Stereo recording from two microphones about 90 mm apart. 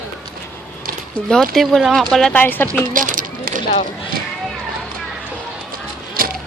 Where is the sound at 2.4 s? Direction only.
20° left (ahead or behind).